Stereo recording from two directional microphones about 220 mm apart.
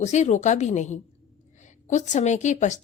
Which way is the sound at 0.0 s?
30° left (ahead or behind).